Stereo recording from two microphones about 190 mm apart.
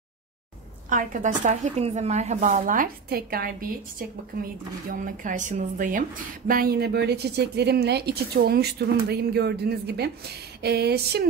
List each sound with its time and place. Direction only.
0.8 s speech: 45° right (ahead or behind)
4.8 s a woman's voice: 45° right (ahead or behind)